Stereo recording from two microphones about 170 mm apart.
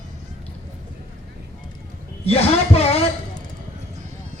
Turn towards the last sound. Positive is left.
turn(degrees=35)  # may be behind; listen again after turning